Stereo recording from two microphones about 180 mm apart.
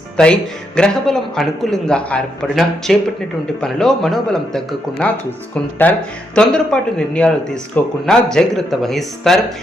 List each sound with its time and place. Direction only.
0.2 s a man's voice: 5° left (ahead or behind)